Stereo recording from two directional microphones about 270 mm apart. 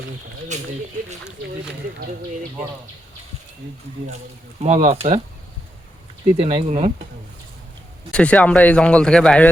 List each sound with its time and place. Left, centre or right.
0.5 s speech: right
4.6 s speech: right
6.4 s speech: right
8.1 s speech: centre